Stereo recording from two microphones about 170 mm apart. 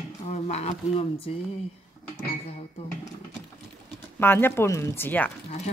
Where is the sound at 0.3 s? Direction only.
40° left (ahead or behind).